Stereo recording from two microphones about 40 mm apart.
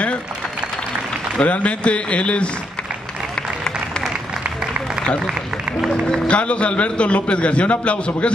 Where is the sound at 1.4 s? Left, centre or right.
Left.